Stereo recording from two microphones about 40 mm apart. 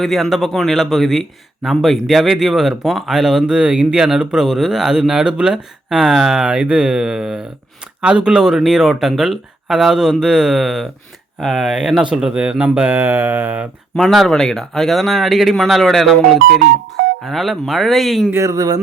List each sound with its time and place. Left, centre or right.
0.0 s speech: centre; by 3.8 s right
3.9 s speech: centre
4.4 s speech: centre
4.9 s speech: centre
6.0 s speech: centre
6.4 s speech: right; by 12.0 s centre
12.2 s speech: right
13.1 s mantra: right
14.3 s speech: centre
17.4 s speech: centre